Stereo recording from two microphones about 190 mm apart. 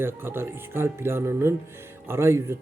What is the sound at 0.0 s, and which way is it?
Speech, 10° right (ahead or behind).